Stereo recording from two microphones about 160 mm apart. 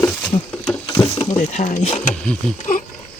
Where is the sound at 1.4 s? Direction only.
50° left (ahead or behind).